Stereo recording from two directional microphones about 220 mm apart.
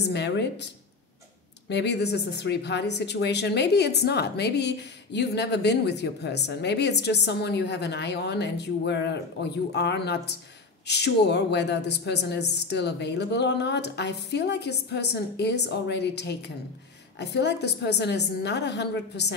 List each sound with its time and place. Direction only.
0.0 s speech: 50° left (ahead or behind)
1.7 s speech: 50° left (ahead or behind)